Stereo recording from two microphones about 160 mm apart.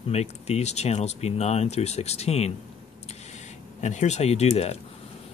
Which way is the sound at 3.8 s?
45° left (ahead or behind).